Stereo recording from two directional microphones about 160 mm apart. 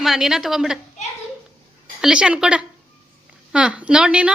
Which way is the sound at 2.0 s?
5° right (ahead or behind).